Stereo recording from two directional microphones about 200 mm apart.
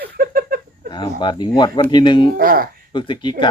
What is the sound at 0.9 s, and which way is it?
Speech, 20° left (ahead or behind).